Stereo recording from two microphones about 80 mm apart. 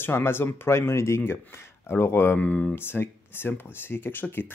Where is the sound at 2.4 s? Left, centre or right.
Centre.